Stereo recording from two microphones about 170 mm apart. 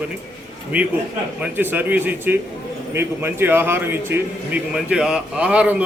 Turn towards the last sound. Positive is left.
turn(degrees=-5)  # may be behind; listen again after turning